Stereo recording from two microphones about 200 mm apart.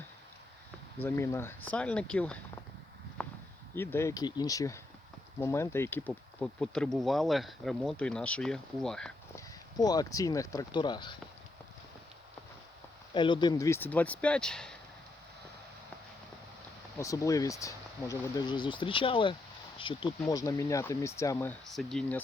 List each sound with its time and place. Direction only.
1.0 s speech: 15° left (ahead or behind)
3.2 s a sound: 5° left (ahead or behind)
3.8 s speech: 15° left (ahead or behind)
9.3 s speech: 20° left (ahead or behind)
13.1 s speech: 25° left (ahead or behind); by 14.8 s 5° left (ahead or behind)
17.0 s speech: 15° left (ahead or behind)